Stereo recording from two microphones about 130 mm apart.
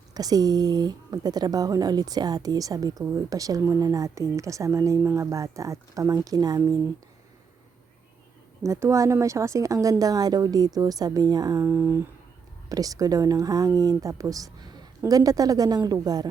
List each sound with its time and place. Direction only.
0.1 s a woman's voice: 30° right (ahead or behind)
8.6 s a woman's voice: 20° right (ahead or behind)